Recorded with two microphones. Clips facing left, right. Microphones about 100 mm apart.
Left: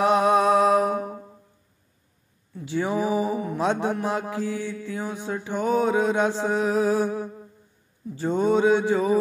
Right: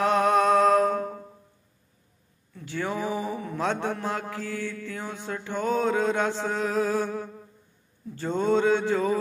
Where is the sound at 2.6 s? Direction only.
15° left (ahead or behind).